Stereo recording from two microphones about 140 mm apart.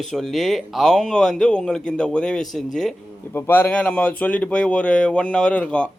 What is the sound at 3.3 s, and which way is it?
Speech, 15° left (ahead or behind).